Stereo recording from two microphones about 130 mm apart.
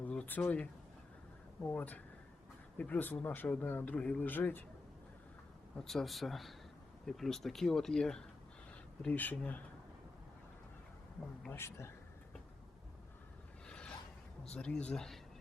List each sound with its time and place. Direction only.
0.0 s a sound: 10° left (ahead or behind)
1.6 s speech: 10° left (ahead or behind)
5.7 s speech: 5° left (ahead or behind)
11.5 s a man's voice: 20° left (ahead or behind)
13.7 s a sound: 5° left (ahead or behind)
14.5 s speech: 10° left (ahead or behind)